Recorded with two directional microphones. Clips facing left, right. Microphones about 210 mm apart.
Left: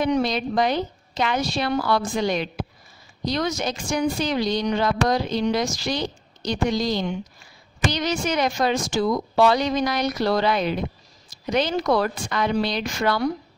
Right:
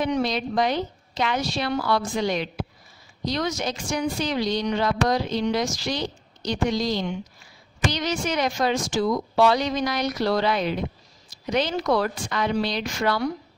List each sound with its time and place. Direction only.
0.0 s speech: 50° left (ahead or behind)